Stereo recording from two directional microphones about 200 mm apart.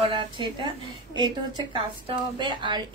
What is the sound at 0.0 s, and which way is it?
A woman's voice, 25° right (ahead or behind).